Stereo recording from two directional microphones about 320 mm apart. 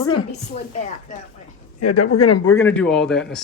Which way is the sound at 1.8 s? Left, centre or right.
Left.